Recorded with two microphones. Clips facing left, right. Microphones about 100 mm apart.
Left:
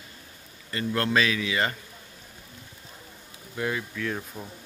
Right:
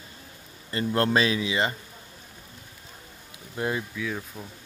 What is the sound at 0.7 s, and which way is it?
Speech, 30° right (ahead or behind).